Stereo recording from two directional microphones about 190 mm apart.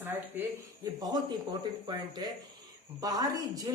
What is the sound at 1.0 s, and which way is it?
Speech, 25° right (ahead or behind).